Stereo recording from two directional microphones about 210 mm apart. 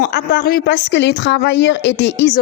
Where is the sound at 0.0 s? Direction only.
55° left (ahead or behind).